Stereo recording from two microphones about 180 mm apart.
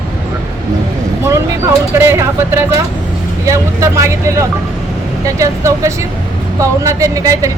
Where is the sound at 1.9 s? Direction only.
15° right (ahead or behind).